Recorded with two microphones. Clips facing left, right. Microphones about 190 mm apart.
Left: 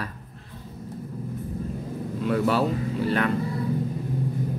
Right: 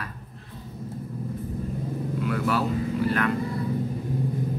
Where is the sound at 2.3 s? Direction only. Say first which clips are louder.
Left 4 dB; 30° left (ahead or behind).